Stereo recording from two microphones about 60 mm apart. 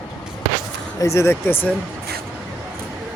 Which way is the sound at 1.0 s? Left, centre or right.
Left.